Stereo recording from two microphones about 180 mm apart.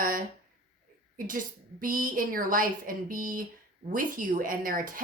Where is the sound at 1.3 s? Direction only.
50° right (ahead or behind).